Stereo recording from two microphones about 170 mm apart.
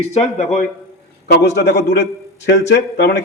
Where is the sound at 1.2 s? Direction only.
75° left (ahead or behind).